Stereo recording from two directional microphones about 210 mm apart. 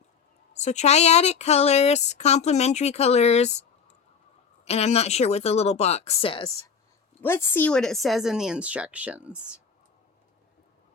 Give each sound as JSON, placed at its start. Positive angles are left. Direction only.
{"t": 0.5, "sound": "speech", "side_deg": 35}
{"t": 4.6, "sound": "speech", "side_deg": 30}
{"t": 7.2, "sound": "speech", "side_deg": 10}